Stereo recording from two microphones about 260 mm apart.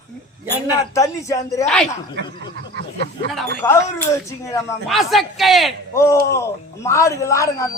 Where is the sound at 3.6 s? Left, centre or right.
Centre.